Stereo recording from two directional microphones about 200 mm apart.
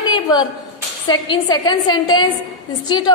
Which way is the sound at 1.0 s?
20° left (ahead or behind).